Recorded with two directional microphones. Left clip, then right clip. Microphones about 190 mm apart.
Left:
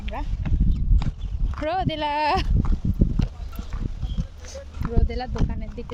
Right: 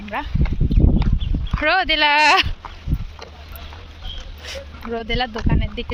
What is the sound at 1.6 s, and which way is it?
Speech, 20° left (ahead or behind).